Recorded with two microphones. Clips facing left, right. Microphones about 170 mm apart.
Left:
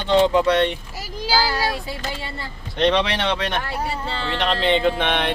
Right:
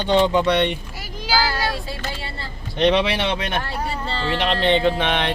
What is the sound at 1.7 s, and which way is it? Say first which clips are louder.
Speech: left 1 dB; 20° left (ahead or behind).